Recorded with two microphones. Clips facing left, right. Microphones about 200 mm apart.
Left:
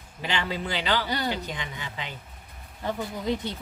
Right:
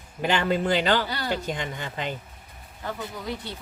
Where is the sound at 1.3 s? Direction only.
50° right (ahead or behind).